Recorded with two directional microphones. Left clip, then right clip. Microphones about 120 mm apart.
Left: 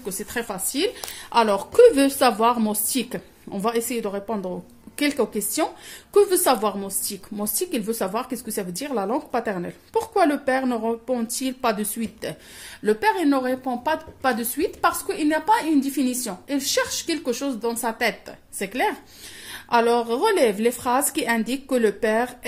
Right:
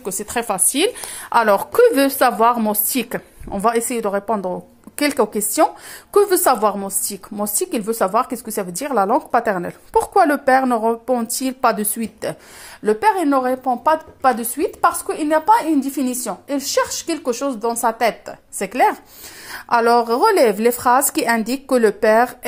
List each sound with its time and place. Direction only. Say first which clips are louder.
0.0 s speech: right 6 dB; 40° right (ahead or behind)
1.3 s a woman's voice: right 4 dB; 30° right (ahead or behind)
12.8 s a woman's voice: right 4 dB; 25° right (ahead or behind)